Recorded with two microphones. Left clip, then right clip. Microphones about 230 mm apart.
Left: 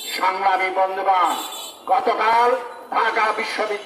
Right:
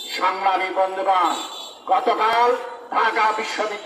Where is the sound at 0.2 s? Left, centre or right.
Left.